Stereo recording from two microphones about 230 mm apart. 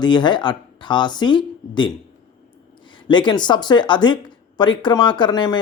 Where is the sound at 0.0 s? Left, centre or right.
Centre.